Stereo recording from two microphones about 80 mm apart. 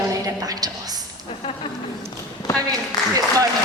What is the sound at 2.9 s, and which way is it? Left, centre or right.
Speech, left.